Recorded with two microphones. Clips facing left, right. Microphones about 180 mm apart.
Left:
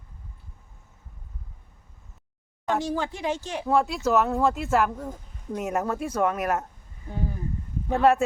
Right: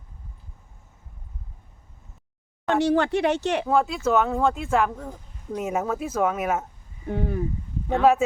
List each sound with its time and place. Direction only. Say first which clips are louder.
2.6 s speech: right 6 dB; 70° right (ahead or behind)
3.7 s speech: left 1 dB; centre (ahead or behind)
7.1 s speech: right 6 dB; 70° right (ahead or behind)